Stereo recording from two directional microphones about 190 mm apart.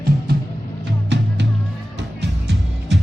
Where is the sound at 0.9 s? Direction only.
65° right (ahead or behind).